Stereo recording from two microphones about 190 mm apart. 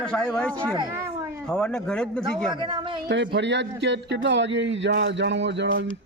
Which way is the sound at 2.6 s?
25° right (ahead or behind).